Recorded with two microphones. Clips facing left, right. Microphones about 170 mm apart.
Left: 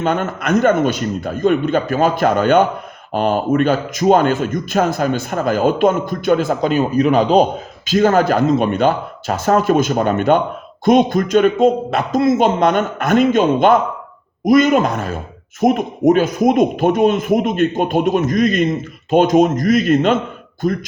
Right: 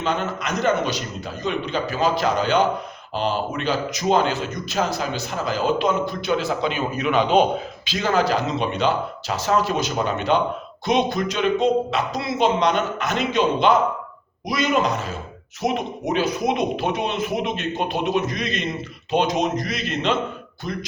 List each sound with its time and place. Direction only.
0.0 s a man's voice: 50° left (ahead or behind)
7.9 s a man's voice: 50° left (ahead or behind)